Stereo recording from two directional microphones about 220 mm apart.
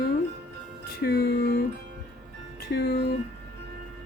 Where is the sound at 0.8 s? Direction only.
45° left (ahead or behind).